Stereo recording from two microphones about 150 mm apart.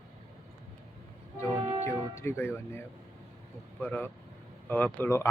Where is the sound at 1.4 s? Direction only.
20° left (ahead or behind).